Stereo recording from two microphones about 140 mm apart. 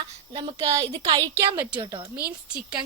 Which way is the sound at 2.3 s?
10° right (ahead or behind).